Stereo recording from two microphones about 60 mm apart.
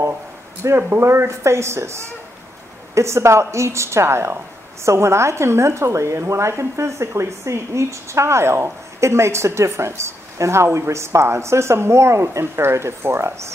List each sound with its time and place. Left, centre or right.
0.7 s a woman's voice: right